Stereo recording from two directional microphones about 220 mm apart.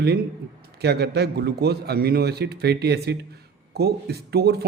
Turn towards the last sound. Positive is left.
turn(degrees=-45)  # may be behind; listen again after turning